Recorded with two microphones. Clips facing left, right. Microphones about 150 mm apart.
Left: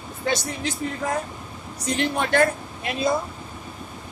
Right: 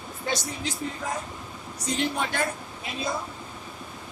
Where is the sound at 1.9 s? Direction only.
60° left (ahead or behind).